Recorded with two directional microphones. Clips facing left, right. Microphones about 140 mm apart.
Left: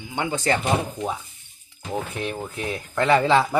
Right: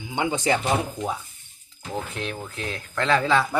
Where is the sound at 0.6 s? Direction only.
Centre (ahead or behind).